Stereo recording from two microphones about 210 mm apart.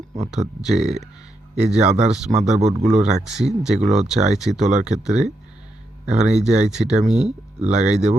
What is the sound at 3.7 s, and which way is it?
Speech, 35° right (ahead or behind).